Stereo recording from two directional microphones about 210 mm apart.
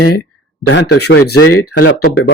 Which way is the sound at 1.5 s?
90° left.